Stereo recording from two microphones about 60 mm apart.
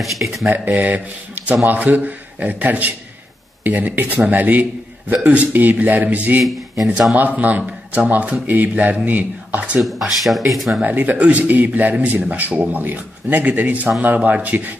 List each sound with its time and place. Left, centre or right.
0.0 s speech: centre
0.5 s speech: right
9.8 s speech: centre
10.8 s speech: right